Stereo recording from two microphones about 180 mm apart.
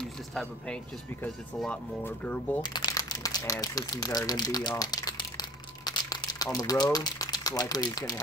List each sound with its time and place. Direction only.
0.0 s speech: 5° left (ahead or behind)
2.6 s crumpling: 25° left (ahead or behind)
3.6 s speech: 20° left (ahead or behind)